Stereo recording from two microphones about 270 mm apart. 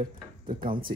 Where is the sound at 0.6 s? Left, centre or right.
Centre.